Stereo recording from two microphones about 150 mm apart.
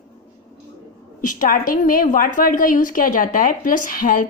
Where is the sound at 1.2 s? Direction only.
65° left (ahead or behind).